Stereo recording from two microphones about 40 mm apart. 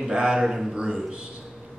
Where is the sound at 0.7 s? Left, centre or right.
Right.